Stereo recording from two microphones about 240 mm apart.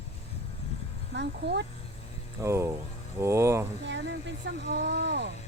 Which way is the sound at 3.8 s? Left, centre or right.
Right.